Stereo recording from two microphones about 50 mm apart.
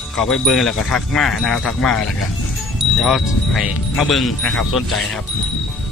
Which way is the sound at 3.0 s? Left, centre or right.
Centre.